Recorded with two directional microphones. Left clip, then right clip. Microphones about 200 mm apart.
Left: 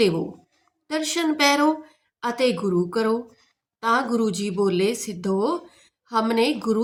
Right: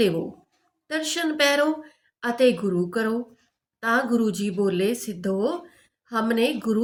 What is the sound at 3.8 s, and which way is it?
A woman's voice, 50° left (ahead or behind).